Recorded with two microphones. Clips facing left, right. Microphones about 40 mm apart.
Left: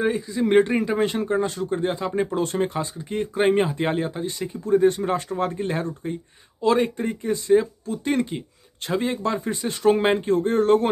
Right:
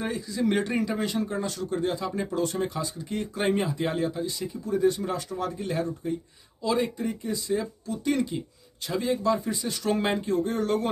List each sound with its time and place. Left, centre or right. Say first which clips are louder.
0.0 s speech: left 5 dB; left